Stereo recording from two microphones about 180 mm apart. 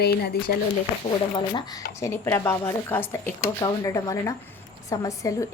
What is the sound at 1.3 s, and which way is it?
A woman's voice, 25° left (ahead or behind).